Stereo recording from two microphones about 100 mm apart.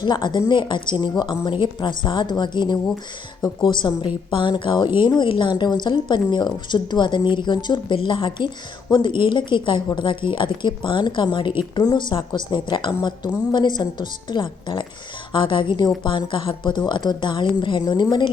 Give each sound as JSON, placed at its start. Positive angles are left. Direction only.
{"t": 0.0, "sound": "a woman's voice", "side_deg": 45}